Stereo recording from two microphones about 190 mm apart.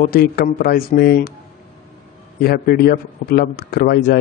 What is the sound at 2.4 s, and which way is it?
Speech, 55° left (ahead or behind).